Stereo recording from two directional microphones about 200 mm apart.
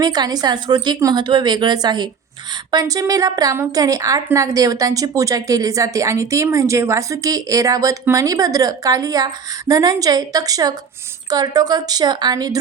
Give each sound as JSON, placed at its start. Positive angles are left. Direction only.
{"t": 0.0, "sound": "a woman's voice", "side_deg": -20}